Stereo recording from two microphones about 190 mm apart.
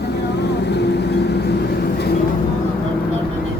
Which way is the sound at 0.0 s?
60° left (ahead or behind).